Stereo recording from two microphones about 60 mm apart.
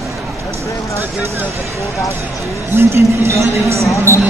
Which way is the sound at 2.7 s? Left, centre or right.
Right.